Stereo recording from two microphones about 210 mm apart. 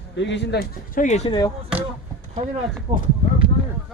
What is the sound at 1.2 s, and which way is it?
Speech, 20° left (ahead or behind).